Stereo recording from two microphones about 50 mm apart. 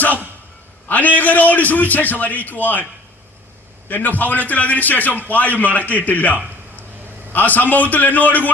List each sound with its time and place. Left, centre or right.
0.9 s a man's voice: left
3.8 s a man's voice: left